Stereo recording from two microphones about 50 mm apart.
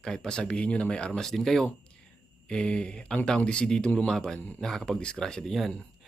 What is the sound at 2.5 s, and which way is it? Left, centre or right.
Speech, centre.